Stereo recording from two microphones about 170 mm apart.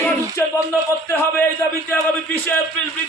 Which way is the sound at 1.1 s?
10° left (ahead or behind).